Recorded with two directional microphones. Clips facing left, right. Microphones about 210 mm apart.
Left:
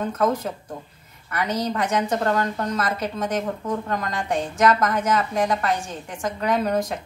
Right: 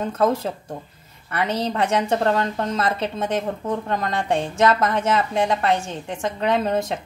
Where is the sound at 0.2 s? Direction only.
30° right (ahead or behind).